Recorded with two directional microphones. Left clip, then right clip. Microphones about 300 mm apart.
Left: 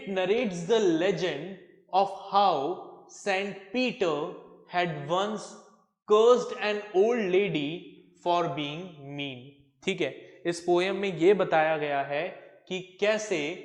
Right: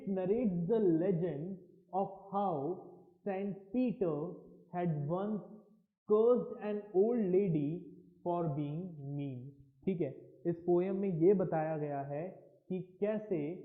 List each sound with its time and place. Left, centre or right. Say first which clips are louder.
0.0 s a man's voice: left 8 dB; centre
2.6 s speech: left 8 dB; left
3.2 s a man's voice: left 10 dB; centre
9.8 s a sound: left 8 dB; centre
10.8 s a man's voice: left 7 dB; centre